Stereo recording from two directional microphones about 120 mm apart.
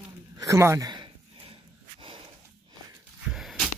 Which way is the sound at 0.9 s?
45° right (ahead or behind).